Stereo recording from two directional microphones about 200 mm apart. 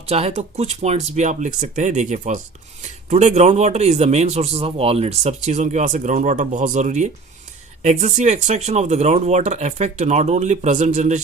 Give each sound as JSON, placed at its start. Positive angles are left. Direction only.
{"t": 0.1, "sound": "a man's voice", "side_deg": -30}